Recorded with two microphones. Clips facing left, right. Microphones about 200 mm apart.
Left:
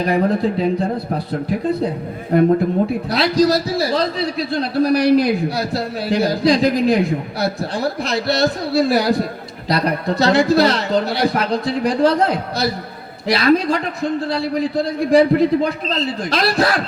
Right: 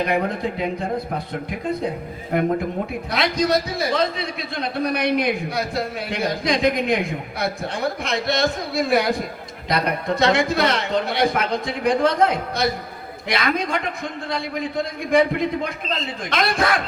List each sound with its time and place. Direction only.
0.0 s a man's voice: 35° left (ahead or behind)
3.1 s a man's voice: 35° left (ahead or behind)